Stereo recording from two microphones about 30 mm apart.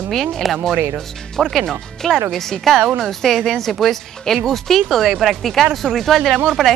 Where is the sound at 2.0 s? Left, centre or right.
Centre.